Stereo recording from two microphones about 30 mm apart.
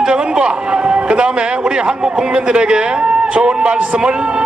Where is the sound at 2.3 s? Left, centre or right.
Right.